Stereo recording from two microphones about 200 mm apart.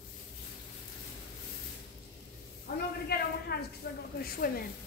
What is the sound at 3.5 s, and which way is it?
Speech, 55° left (ahead or behind).